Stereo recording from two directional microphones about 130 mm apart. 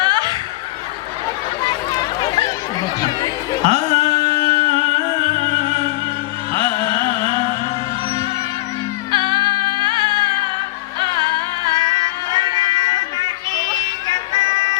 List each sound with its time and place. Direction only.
0.0 s snicker: 35° right (ahead or behind)
1.6 s a sound: 35° left (ahead or behind)
3.0 s chatter: 35° left (ahead or behind)
3.6 s music: 55° right (ahead or behind)
9.1 s music: 40° right (ahead or behind)